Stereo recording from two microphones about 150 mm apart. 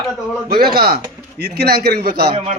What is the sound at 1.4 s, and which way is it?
Speech, 90° right.